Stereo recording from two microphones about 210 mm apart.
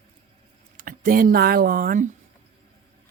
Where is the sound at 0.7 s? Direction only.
40° right (ahead or behind).